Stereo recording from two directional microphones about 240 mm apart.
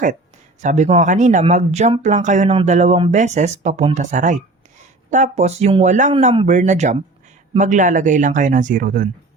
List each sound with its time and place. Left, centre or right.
0.6 s speech: right